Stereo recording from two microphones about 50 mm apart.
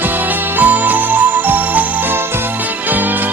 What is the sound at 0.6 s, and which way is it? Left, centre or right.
Music, right.